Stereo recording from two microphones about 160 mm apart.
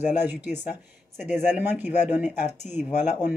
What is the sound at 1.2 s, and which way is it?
Speech, 45° left (ahead or behind).